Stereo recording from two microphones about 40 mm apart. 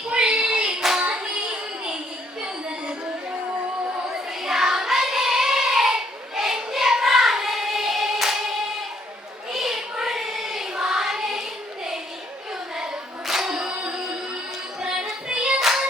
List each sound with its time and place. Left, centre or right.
0.1 s child singing: right
0.8 s music: centre
4.4 s child singing: centre
9.5 s a sound: centre
10.0 s choir: centre
12.7 s singing: centre
14.8 s music: centre